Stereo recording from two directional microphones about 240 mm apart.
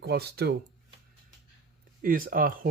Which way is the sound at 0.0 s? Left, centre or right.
Right.